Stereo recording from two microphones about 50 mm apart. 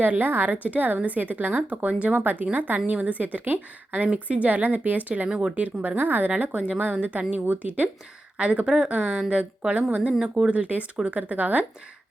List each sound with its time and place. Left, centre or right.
0.0 s speech: right
5.3 s speech: centre